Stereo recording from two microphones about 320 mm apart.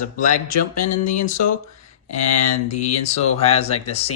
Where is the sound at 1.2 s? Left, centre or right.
Left.